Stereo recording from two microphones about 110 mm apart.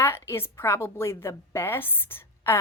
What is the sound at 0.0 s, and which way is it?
A woman's voice, 20° left (ahead or behind).